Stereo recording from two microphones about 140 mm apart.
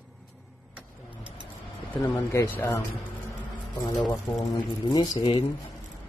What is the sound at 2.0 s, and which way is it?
Speech, 15° left (ahead or behind).